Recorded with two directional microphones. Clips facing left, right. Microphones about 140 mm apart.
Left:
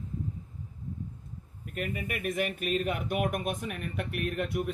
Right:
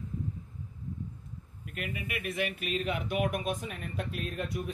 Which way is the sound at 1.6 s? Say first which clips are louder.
Left 4 dB; 40° left (ahead or behind).